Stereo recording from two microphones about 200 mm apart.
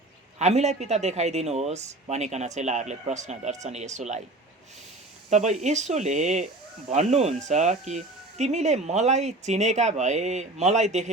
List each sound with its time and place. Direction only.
0.3 s speech: 35° right (ahead or behind)
5.3 s speech: 35° right (ahead or behind)